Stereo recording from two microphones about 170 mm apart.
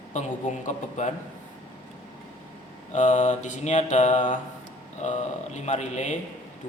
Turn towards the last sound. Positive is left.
turn(degrees=45)  # may be behind; listen again after turning